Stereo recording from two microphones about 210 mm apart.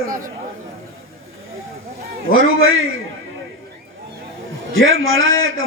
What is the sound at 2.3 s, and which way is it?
Speech, 70° right (ahead or behind).